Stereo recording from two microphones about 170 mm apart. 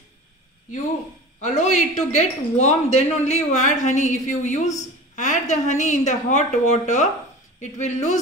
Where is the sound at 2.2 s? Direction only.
40° left (ahead or behind).